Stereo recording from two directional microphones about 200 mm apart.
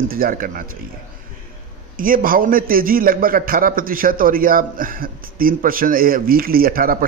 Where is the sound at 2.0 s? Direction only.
45° right (ahead or behind).